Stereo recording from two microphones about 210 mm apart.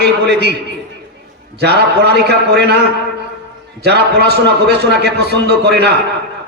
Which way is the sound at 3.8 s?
50° right (ahead or behind).